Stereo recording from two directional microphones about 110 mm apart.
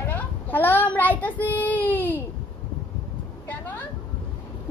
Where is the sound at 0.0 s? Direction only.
15° left (ahead or behind).